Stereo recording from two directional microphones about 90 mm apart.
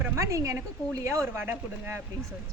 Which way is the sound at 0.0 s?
35° right (ahead or behind).